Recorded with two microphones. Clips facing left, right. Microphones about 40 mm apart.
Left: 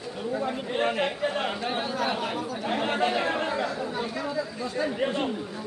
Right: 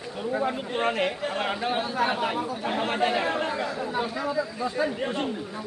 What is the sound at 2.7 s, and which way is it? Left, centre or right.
Speech, centre.